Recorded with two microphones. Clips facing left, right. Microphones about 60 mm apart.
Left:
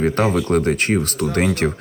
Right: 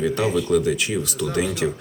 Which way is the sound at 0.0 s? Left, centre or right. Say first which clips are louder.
Left 3 dB; left.